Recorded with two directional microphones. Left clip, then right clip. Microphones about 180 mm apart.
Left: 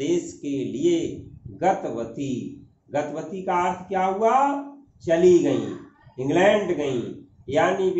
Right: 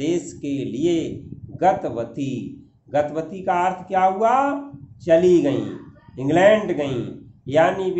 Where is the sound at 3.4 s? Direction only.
50° right (ahead or behind).